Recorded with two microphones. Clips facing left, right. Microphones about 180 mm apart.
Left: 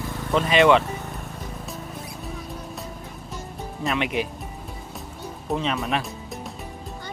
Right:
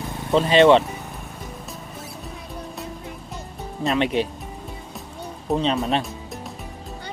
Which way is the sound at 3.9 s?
30° right (ahead or behind).